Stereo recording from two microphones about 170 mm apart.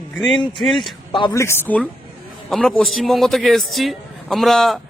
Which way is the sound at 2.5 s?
Centre (ahead or behind).